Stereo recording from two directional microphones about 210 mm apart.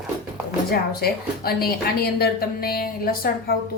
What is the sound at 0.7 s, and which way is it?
A woman's voice, 45° left (ahead or behind).